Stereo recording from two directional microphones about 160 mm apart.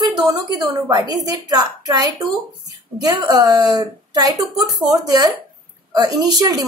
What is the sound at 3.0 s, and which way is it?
Speech, 25° right (ahead or behind).